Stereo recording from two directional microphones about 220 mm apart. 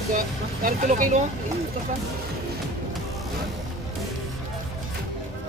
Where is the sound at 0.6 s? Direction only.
35° right (ahead or behind).